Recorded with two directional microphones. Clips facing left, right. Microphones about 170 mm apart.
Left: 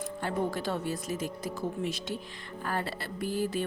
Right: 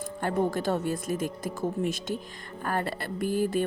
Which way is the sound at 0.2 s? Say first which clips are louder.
Right 5 dB; 50° right (ahead or behind).